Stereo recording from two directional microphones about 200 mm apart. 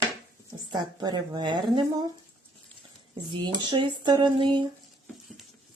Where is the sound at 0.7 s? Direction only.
20° right (ahead or behind).